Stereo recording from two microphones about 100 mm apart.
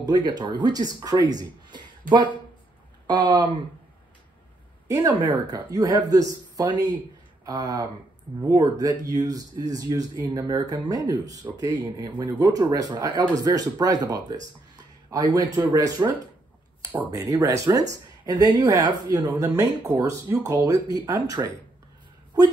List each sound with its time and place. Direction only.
0.0 s speech: 45° right (ahead or behind)
4.8 s speech: 30° right (ahead or behind)
17.1 s speech: 35° right (ahead or behind)
19.6 s speech: 20° right (ahead or behind)
20.0 s speech: 35° right (ahead or behind)